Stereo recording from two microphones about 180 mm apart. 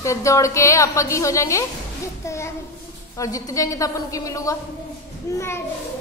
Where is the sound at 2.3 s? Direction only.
15° left (ahead or behind).